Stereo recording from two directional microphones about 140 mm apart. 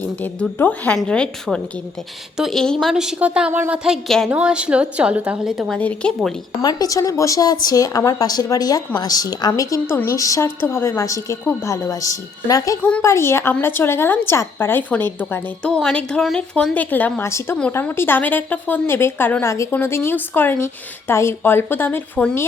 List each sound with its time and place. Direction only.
0.0 s a woman's voice: 10° left (ahead or behind)
5.7 s a woman's voice: 10° left (ahead or behind)
6.6 s a woman's voice: 25° left (ahead or behind); by 22.4 s 10° left (ahead or behind)